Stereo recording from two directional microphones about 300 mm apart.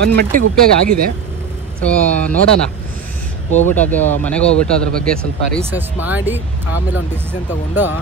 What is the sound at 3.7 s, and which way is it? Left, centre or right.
Speech, centre.